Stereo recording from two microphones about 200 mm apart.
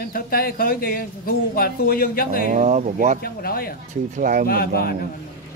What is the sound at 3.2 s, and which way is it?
Speech, 50° left (ahead or behind).